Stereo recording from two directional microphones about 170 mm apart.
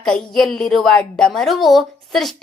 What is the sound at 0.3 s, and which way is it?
A woman's voice, 5° left (ahead or behind).